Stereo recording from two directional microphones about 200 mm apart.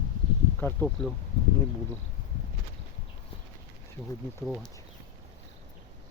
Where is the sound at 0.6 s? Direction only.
10° left (ahead or behind).